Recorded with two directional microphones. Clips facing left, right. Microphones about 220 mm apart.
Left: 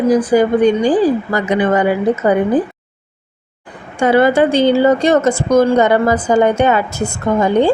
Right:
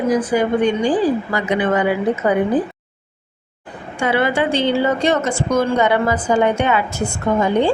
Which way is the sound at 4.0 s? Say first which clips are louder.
Left 7 dB; 45° left (ahead or behind).